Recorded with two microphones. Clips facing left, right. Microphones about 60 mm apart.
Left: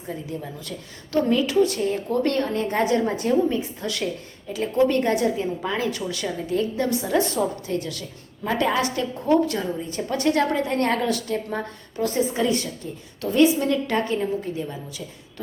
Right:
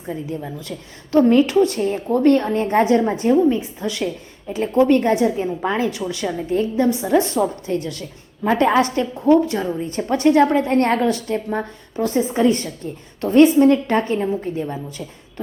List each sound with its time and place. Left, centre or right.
1.3 s a woman's voice: right; by 4.5 s centre
4.5 s a woman's voice: right
9.2 s a woman's voice: right